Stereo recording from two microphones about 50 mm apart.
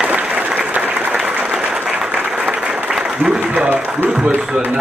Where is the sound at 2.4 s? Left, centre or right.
Right.